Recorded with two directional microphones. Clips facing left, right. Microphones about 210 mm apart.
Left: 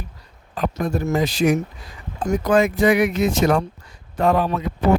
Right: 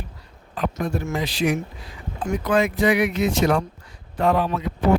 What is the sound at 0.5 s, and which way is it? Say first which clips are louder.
Speech: left 2 dB; 40° left (ahead or behind).